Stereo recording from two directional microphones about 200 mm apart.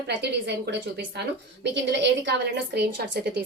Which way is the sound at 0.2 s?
60° right (ahead or behind).